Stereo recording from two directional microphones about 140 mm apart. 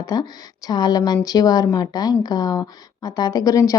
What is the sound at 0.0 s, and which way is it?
A woman's voice, 25° left (ahead or behind).